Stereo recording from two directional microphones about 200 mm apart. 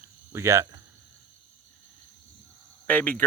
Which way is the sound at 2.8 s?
5° left (ahead or behind).